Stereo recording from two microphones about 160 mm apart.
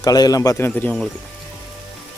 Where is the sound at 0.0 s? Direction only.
25° left (ahead or behind).